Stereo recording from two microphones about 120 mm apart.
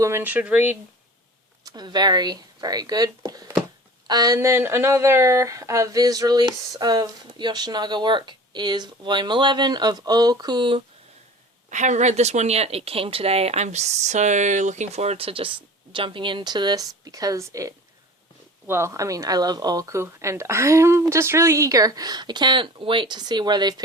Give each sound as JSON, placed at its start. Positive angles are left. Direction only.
{"t": 0.0, "sound": "speech", "side_deg": -20}
{"t": 1.6, "sound": "speech", "side_deg": -35}
{"t": 4.4, "sound": "speech", "side_deg": -20}
{"t": 11.7, "sound": "speech", "side_deg": -85}